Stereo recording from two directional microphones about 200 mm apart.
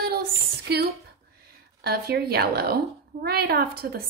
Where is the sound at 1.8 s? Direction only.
50° right (ahead or behind).